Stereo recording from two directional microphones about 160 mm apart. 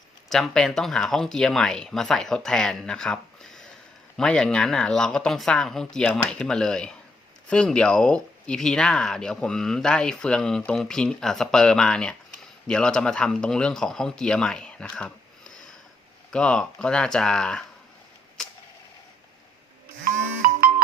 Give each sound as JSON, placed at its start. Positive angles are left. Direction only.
{"t": 0.3, "sound": "speech", "side_deg": 0}
{"t": 20.4, "sound": "music", "side_deg": -60}